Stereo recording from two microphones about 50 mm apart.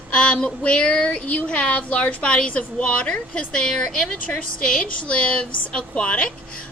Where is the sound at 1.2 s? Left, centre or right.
Left.